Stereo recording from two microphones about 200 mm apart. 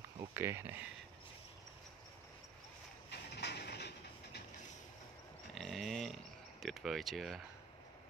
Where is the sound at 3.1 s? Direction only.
55° left (ahead or behind).